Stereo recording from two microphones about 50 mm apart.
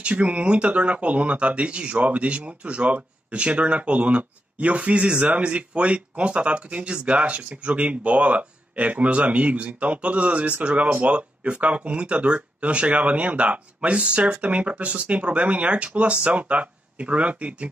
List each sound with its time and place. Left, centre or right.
0.0 s speech: right